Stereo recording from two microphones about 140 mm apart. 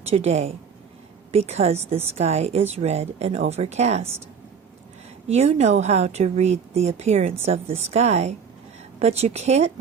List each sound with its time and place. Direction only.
0.1 s a woman's voice: 50° right (ahead or behind)
5.3 s a woman's voice: 50° right (ahead or behind)